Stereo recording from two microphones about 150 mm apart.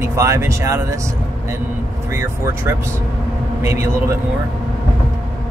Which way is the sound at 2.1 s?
20° right (ahead or behind).